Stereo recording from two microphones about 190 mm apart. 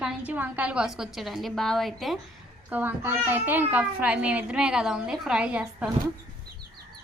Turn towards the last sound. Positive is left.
turn(degrees=-5)  # may be behind; listen again after turning